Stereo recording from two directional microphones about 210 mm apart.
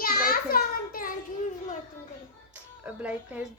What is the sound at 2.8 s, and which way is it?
Speech, 5° right (ahead or behind).